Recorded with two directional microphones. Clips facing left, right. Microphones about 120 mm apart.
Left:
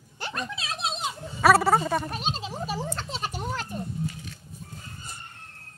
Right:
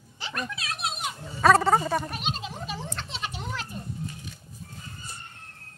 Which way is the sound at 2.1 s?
30° left (ahead or behind).